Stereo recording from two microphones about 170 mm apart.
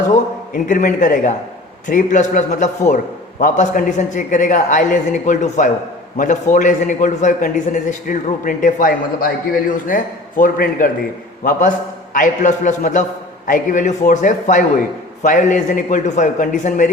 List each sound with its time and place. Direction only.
0.1 s a man's voice: 50° left (ahead or behind)
12.1 s a man's voice: 45° left (ahead or behind)